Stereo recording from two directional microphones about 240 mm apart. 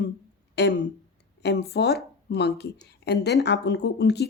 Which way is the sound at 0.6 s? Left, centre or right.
Left.